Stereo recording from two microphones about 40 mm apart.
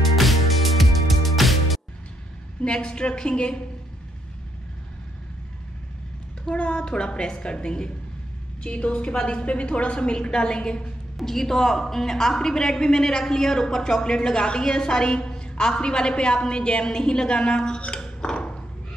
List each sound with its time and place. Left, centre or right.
0.0 s music: centre
2.6 s a woman's voice: left
6.4 s a woman's voice: left
11.1 s a woman's voice: centre